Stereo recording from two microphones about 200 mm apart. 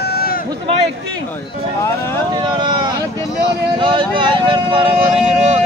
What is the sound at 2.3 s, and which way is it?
Speech, 20° right (ahead or behind).